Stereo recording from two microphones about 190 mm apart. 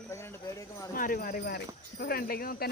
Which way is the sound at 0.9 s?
45° left (ahead or behind).